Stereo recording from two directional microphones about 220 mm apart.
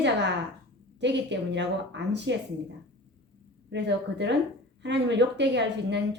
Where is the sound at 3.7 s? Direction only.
50° right (ahead or behind).